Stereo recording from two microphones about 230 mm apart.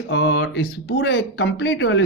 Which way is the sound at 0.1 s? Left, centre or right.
Left.